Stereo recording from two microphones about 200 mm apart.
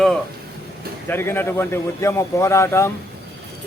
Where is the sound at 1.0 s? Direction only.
10° left (ahead or behind).